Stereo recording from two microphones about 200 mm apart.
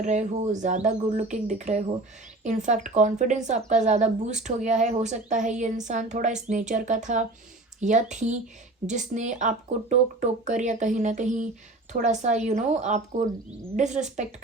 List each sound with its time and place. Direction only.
0.0 s speech: 35° right (ahead or behind)